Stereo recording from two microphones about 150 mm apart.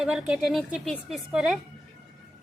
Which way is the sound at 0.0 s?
5° right (ahead or behind).